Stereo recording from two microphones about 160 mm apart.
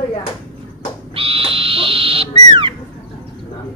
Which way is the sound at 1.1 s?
35° right (ahead or behind).